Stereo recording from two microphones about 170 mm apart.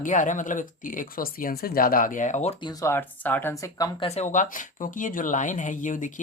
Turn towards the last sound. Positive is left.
turn(degrees=50)  # may be behind; listen again after turning